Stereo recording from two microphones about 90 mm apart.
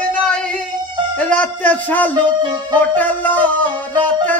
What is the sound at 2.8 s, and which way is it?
Music, 20° left (ahead or behind).